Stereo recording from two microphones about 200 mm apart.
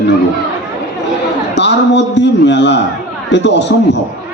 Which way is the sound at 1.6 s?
60° left (ahead or behind).